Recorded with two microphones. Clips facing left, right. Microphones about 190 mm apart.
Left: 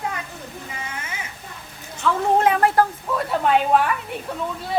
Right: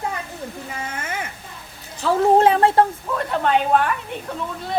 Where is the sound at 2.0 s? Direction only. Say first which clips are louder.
Right 4 dB; 35° right (ahead or behind).